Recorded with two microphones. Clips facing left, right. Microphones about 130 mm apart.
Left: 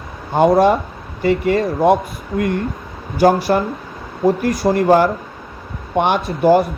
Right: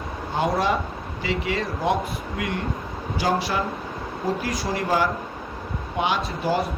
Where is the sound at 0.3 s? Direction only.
55° left (ahead or behind).